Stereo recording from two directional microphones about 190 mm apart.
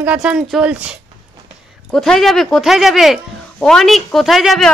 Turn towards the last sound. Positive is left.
turn(degrees=0)  # may be behind; listen again after turning